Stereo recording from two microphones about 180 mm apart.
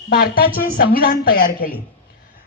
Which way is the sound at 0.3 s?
50° left (ahead or behind).